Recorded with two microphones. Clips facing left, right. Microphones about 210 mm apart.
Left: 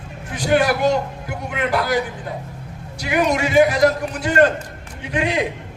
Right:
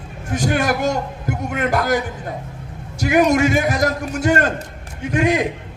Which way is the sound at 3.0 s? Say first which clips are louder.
Right 5 dB; 45° right (ahead or behind).